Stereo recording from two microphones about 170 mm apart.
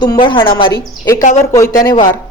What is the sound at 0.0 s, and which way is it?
Speech, 25° left (ahead or behind).